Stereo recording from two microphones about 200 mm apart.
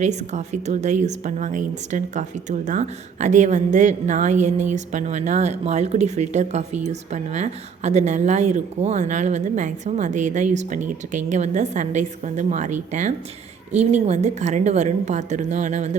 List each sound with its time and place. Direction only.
0.0 s a woman's voice: 35° right (ahead or behind)